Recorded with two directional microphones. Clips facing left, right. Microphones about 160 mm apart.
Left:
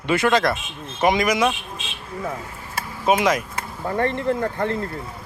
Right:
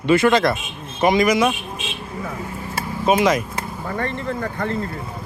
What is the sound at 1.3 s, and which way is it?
Speech, 5° right (ahead or behind).